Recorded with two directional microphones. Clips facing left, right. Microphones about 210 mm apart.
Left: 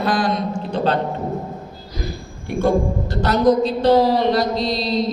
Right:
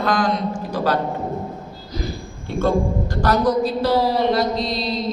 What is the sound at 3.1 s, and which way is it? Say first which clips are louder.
Speech: right 1 dB; 20° left (ahead or behind).